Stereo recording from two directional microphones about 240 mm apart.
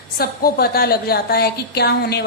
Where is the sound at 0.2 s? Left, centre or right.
Left.